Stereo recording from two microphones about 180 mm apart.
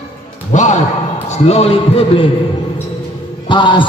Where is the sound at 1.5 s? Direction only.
35° left (ahead or behind).